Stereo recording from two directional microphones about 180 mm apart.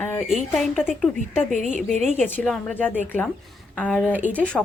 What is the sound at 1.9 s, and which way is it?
Speech, centre (ahead or behind).